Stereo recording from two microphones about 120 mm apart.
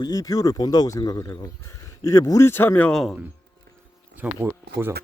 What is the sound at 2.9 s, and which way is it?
Speech, centre (ahead or behind).